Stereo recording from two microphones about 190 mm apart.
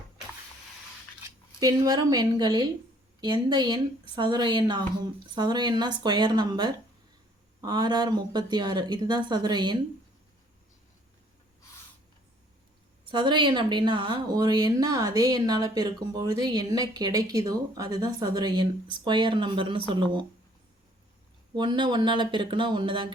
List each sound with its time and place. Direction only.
1.5 s speech: 20° right (ahead or behind)
13.1 s speech: 25° right (ahead or behind)
21.5 s speech: 25° right (ahead or behind)